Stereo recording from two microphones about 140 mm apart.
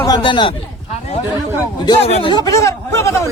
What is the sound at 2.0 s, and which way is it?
Speech, 45° left (ahead or behind).